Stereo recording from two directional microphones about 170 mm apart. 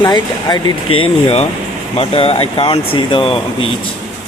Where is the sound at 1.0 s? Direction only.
35° left (ahead or behind).